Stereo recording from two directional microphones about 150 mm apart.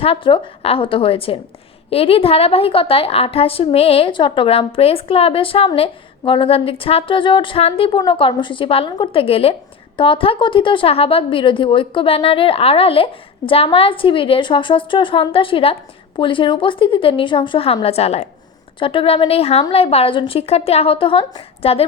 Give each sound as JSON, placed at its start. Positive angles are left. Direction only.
{"t": 0.0, "sound": "a woman's voice", "side_deg": 35}